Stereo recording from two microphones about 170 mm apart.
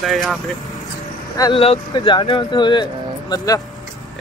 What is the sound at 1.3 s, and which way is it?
Speech, 25° left (ahead or behind).